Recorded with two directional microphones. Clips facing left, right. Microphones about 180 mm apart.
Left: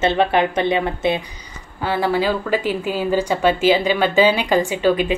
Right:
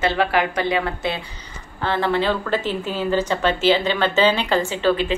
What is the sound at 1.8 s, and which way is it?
Speech, 10° left (ahead or behind).